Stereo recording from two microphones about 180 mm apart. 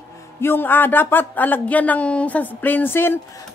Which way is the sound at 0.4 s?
10° left (ahead or behind).